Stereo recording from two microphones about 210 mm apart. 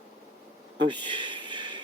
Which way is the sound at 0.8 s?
20° right (ahead or behind).